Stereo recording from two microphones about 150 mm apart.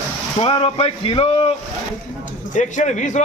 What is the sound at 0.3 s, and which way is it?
Speech, 35° left (ahead or behind).